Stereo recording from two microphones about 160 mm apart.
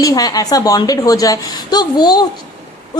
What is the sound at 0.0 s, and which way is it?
A woman's voice, 25° left (ahead or behind).